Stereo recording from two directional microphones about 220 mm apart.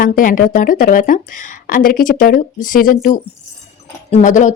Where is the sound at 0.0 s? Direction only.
40° left (ahead or behind).